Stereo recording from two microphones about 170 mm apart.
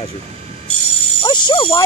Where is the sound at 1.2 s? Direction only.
25° left (ahead or behind).